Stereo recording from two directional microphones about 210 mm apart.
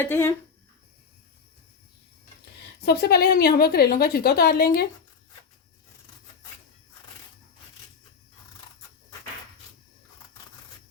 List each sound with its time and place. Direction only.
0.0 s speech: 10° left (ahead or behind)
2.4 s a woman's voice: 50° left (ahead or behind)